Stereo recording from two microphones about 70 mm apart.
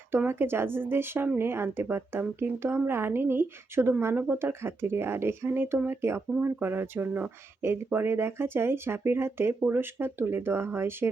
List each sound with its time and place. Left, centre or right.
0.3 s speech: right